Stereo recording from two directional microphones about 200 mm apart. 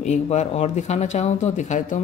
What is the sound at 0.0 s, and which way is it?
A woman's voice, 35° left (ahead or behind).